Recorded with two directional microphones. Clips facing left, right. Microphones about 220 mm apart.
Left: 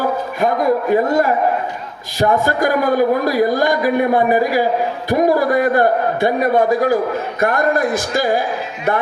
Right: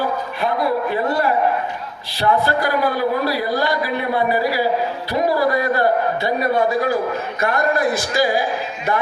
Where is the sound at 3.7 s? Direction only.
15° left (ahead or behind).